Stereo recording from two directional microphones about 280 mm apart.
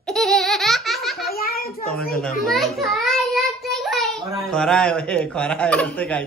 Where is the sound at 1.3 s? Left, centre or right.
Left.